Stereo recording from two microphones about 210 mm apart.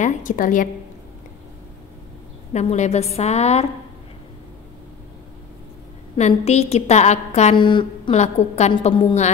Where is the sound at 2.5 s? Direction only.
35° left (ahead or behind).